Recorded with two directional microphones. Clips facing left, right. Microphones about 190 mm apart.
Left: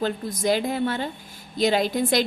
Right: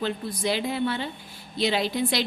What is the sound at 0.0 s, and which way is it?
A woman's voice, 45° left (ahead or behind).